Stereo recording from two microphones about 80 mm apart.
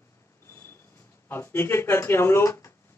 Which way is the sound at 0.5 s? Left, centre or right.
Left.